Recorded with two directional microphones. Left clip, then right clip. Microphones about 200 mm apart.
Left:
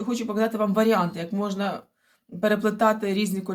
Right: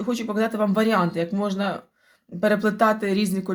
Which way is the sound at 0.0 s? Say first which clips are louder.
Right 1 dB; 35° right (ahead or behind).